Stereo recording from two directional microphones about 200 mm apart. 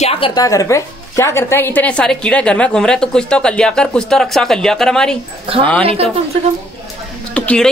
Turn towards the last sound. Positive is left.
turn(degrees=5)  # may be behind; listen again after turning